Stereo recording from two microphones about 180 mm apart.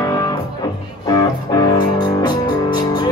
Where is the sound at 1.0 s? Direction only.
20° left (ahead or behind).